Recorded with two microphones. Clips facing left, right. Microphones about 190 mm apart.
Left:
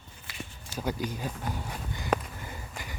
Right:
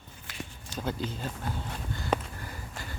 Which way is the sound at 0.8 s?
10° left (ahead or behind).